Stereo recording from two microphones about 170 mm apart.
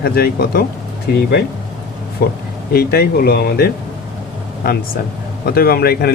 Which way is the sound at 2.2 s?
60° left (ahead or behind).